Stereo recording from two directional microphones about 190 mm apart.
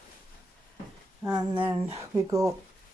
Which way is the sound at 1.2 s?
25° right (ahead or behind).